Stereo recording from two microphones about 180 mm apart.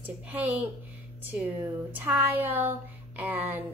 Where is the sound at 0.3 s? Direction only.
10° right (ahead or behind).